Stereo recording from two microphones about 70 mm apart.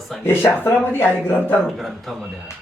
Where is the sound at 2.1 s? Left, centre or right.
Centre.